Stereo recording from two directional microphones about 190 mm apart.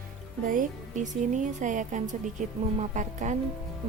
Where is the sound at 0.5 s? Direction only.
40° right (ahead or behind).